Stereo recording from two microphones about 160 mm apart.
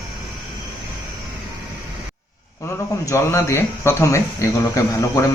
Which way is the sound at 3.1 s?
15° left (ahead or behind).